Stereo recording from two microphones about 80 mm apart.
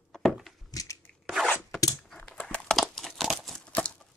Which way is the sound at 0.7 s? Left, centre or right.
Left.